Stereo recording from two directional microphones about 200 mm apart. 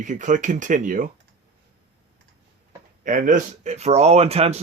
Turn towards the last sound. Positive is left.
turn(degrees=-30)  # may be behind; listen again after turning